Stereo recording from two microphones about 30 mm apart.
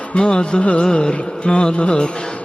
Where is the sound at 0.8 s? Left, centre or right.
Left.